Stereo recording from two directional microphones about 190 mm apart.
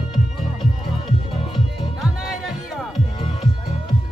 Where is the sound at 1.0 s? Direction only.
25° left (ahead or behind).